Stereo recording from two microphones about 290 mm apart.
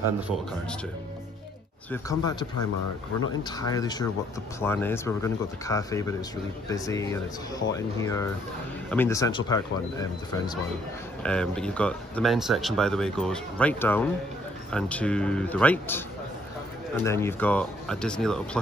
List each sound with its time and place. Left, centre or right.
1.9 s speech: centre
17.0 s speech: centre